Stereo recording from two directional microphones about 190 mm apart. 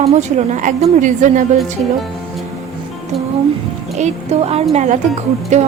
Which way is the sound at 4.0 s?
35° right (ahead or behind).